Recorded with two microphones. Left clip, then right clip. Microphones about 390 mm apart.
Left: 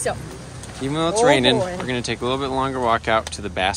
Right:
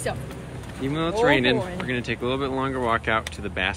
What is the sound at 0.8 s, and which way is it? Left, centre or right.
Speech, centre.